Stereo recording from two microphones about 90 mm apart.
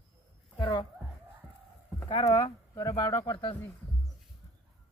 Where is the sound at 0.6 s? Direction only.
65° left (ahead or behind).